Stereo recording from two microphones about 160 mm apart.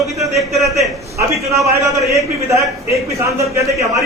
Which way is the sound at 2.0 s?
20° right (ahead or behind).